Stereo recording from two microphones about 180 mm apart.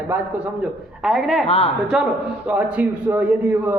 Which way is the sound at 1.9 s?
5° right (ahead or behind).